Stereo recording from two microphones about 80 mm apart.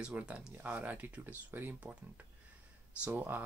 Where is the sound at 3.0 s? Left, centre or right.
Right.